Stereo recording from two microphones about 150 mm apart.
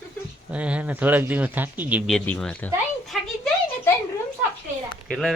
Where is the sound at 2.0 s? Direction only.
5° left (ahead or behind).